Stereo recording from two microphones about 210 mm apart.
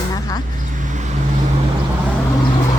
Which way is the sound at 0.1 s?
15° left (ahead or behind).